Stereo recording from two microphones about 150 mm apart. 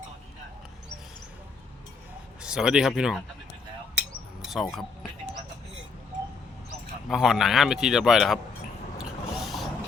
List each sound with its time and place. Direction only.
2.4 s speech: 5° right (ahead or behind)
4.4 s speech: centre (ahead or behind)
7.1 s a man's voice: centre (ahead or behind)
9.0 s a sound: 5° right (ahead or behind)